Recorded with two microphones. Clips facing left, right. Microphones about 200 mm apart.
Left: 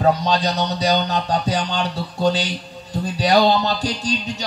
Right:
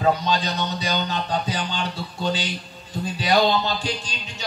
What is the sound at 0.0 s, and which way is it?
Music, 40° left (ahead or behind).